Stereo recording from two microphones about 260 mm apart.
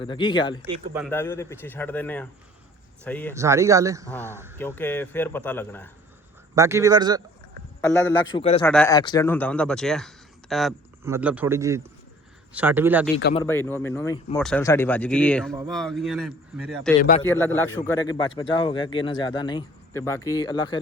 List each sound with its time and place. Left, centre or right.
0.0 s a man's voice: centre
3.3 s a man's voice: centre
4.5 s a man's voice: centre
6.6 s a man's voice: centre
7.8 s a man's voice: centre
8.2 s speech: centre
8.6 s a man's voice: centre
13.3 s a man's voice: centre
17.0 s a man's voice: left
17.2 s a man's voice: centre